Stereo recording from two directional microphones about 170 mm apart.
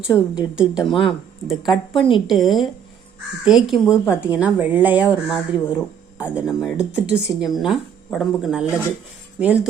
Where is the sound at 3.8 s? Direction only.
15° left (ahead or behind).